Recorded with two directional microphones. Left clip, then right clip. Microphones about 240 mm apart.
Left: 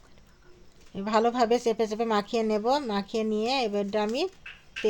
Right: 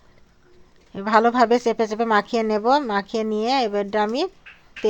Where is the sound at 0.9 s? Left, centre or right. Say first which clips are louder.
Right 7 dB; centre.